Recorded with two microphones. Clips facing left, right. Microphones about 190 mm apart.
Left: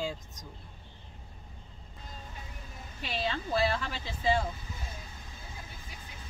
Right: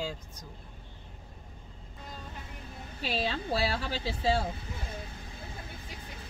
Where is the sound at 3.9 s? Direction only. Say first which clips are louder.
Right 1 dB; 35° right (ahead or behind).